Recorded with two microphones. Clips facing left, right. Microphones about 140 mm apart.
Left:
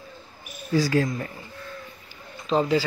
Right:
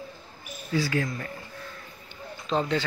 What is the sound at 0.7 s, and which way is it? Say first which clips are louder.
Speech: left 5 dB; 40° left (ahead or behind).